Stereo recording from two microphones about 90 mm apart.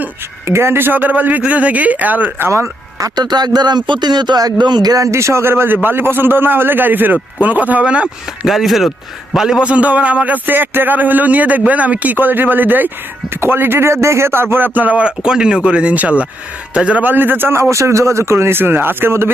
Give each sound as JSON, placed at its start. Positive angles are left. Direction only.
{"t": 0.4, "sound": "speech", "side_deg": -30}
{"t": 2.5, "sound": "speech", "side_deg": -30}
{"t": 3.2, "sound": "a man's voice", "side_deg": -50}